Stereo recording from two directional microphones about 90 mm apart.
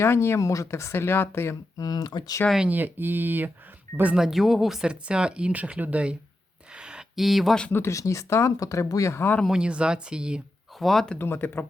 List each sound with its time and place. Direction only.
0.0 s speech: 30° left (ahead or behind)
1.8 s speech: 50° left (ahead or behind)
2.6 s speech: 20° right (ahead or behind)
4.1 s speech: 5° right (ahead or behind)
7.7 s speech: 30° left (ahead or behind)
9.5 s speech: 10° right (ahead or behind)
10.8 s speech: 5° left (ahead or behind)
11.2 s speech: 25° left (ahead or behind)